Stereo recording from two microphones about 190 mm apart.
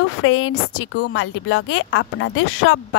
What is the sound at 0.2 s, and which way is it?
A woman's voice, 90° left.